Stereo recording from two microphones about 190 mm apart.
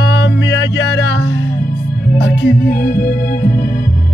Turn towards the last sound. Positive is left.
turn(degrees=50)  # may be behind; listen again after turning